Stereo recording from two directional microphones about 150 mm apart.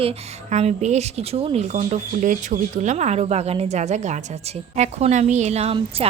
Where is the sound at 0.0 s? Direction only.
40° right (ahead or behind).